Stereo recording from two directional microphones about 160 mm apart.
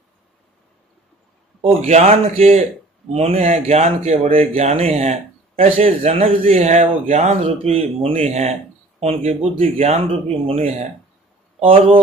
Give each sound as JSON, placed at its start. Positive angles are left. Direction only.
{"t": 1.6, "sound": "speech", "side_deg": -45}